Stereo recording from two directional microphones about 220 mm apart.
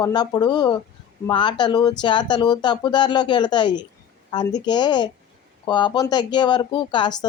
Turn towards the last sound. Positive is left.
turn(degrees=20)  # may be behind; listen again after turning